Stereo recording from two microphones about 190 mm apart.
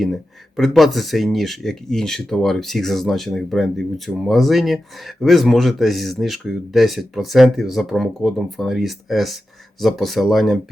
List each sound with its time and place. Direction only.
0.0 s speech: centre (ahead or behind)